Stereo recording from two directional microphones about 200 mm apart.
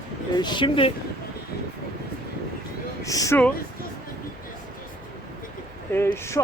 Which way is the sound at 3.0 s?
15° left (ahead or behind).